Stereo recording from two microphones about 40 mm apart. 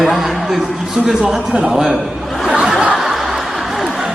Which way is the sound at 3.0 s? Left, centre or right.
Centre.